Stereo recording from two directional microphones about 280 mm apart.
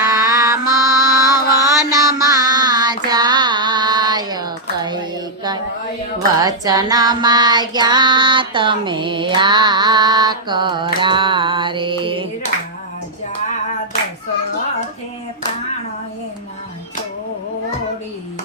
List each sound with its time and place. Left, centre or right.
0.0 s mantra: centre
1.4 s mantra: centre
2.0 s child singing: centre
6.4 s child singing: centre